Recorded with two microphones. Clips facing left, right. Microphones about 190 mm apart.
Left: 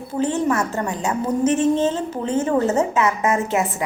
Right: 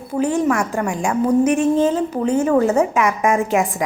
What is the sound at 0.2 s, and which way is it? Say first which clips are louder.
A woman's voice: right 2 dB; 10° right (ahead or behind).